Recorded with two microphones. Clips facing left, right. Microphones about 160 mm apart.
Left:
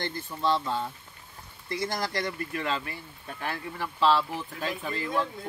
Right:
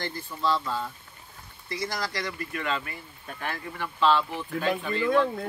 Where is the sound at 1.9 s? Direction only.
25° left (ahead or behind).